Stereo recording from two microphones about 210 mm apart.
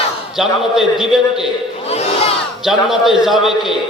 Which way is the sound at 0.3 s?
Centre (ahead or behind).